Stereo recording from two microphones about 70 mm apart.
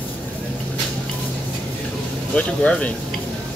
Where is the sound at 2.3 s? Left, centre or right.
Centre.